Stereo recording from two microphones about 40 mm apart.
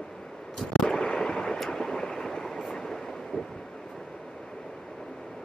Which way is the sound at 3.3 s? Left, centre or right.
Centre.